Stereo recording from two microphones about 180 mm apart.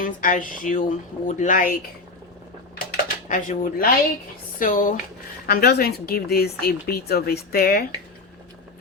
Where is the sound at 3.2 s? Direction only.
45° left (ahead or behind).